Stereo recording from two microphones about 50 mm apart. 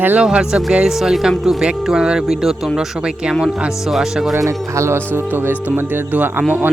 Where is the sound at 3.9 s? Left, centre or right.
Centre.